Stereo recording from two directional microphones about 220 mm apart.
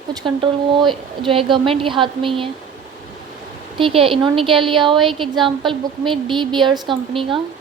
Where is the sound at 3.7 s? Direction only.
25° right (ahead or behind).